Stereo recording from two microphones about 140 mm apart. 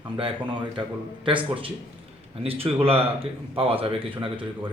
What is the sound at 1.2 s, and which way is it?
A man's voice, 40° right (ahead or behind).